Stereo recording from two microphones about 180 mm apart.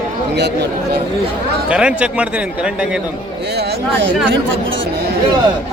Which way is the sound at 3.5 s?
60° right (ahead or behind).